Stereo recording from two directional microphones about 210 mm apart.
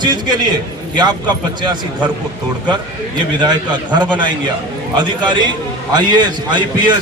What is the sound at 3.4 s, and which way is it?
Speech, 20° right (ahead or behind).